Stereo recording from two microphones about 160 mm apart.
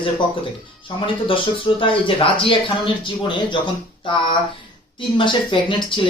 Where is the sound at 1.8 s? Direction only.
35° left (ahead or behind).